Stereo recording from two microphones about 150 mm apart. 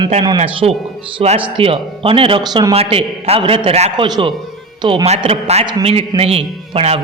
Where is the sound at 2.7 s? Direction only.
40° right (ahead or behind).